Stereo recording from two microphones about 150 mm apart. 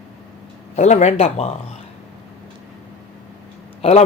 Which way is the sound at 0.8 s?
50° left (ahead or behind).